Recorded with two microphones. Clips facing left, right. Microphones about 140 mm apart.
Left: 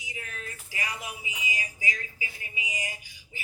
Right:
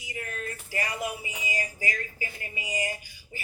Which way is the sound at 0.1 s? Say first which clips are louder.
Right 6 dB; 50° right (ahead or behind).